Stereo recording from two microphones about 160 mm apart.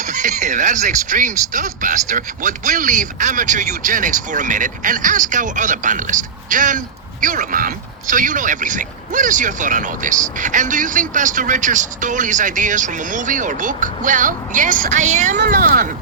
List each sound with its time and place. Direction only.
0.0 s speech: 50° right (ahead or behind)
15.4 s speech: 60° right (ahead or behind)